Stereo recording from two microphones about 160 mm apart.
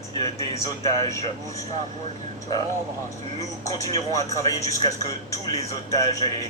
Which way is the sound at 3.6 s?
20° left (ahead or behind).